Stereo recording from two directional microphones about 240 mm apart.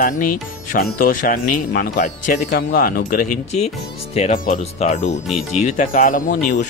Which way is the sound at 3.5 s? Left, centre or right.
Left.